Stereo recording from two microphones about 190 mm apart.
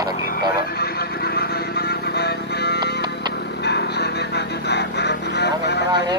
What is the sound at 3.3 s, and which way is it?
Vehicle, 60° left (ahead or behind).